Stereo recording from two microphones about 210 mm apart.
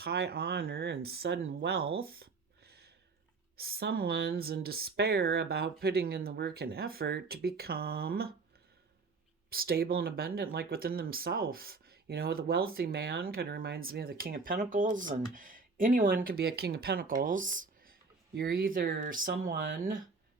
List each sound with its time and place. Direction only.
0.0 s speech: 50° right (ahead or behind)
2.0 s a sound: 45° right (ahead or behind)
3.6 s speech: 50° right (ahead or behind)
9.5 s speech: 45° right (ahead or behind)